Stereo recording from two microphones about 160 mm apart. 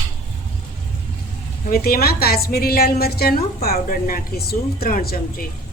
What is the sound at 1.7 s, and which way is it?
A woman's voice, 70° left (ahead or behind).